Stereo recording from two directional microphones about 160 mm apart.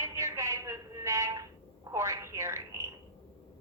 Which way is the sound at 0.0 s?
20° right (ahead or behind).